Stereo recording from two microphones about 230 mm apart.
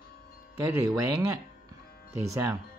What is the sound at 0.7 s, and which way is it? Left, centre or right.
Speech, centre.